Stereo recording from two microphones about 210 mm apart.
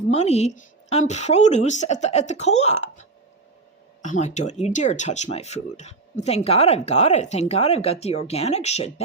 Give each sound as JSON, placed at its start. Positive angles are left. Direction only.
{"t": 0.1, "sound": "speech", "side_deg": 30}